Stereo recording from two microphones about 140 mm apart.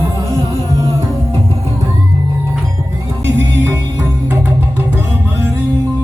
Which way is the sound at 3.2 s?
20° right (ahead or behind).